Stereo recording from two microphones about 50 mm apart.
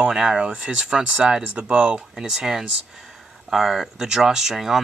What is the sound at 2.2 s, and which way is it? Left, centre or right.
Speech, centre.